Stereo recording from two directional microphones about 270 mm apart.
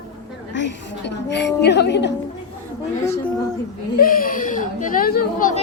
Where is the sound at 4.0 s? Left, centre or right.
Left.